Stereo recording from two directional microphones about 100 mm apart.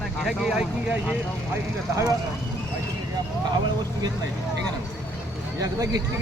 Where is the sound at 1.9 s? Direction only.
30° right (ahead or behind).